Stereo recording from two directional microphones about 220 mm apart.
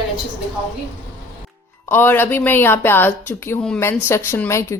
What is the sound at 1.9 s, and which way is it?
A woman's voice, 10° left (ahead or behind).